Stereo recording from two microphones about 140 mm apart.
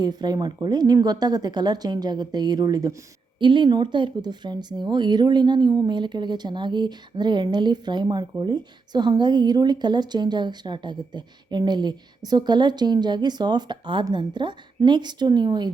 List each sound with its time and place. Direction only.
0.0 s speech: 30° right (ahead or behind)